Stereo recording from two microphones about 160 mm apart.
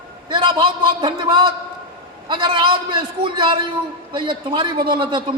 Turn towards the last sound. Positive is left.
turn(degrees=-30)  # may be behind; listen again after turning